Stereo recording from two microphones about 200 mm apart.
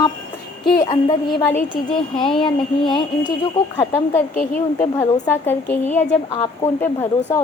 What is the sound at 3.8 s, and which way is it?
A woman's voice, 10° left (ahead or behind).